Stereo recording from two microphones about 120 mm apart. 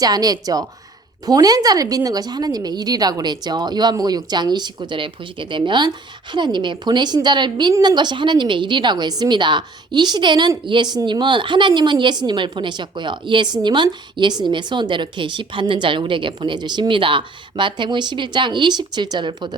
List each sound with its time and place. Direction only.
0.0 s a woman's voice: 30° right (ahead or behind)